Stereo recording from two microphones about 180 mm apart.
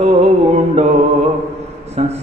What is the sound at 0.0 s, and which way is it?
Music, 35° right (ahead or behind).